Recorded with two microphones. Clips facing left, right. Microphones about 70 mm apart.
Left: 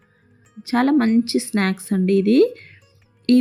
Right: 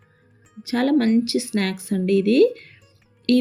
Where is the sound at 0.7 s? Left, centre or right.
Left.